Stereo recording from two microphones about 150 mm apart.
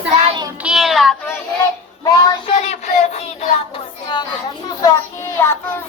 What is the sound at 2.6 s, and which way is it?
Child singing, 45° left (ahead or behind).